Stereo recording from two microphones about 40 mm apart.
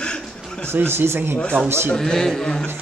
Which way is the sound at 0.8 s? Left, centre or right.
Right.